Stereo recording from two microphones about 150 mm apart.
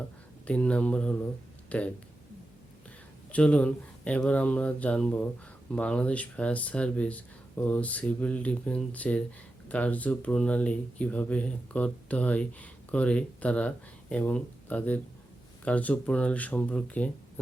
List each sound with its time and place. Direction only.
0.4 s speech: 10° left (ahead or behind)
3.3 s speech: 10° left (ahead or behind)